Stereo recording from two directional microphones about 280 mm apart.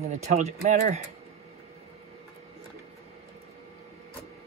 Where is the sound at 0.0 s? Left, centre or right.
Right.